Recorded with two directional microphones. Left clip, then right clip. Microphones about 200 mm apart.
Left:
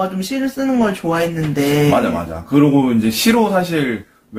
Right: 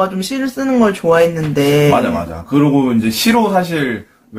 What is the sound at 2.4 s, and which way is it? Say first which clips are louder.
A man's voice: even; 5° left (ahead or behind).